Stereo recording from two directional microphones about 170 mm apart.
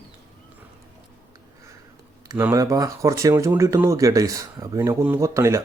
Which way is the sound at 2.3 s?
15° right (ahead or behind).